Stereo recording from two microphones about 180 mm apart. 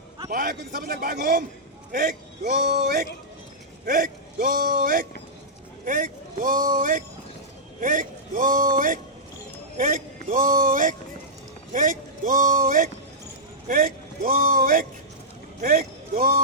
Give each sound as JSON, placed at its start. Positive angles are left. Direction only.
{"t": 0.3, "sound": "a man's voice", "side_deg": -50}